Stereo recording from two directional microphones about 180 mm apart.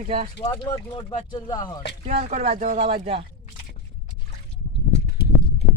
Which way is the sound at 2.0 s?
40° right (ahead or behind).